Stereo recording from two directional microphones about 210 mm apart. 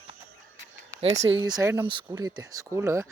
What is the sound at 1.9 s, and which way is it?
Speech, 25° right (ahead or behind).